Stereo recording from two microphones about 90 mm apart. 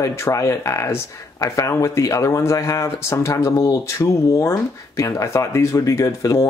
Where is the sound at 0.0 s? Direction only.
35° left (ahead or behind).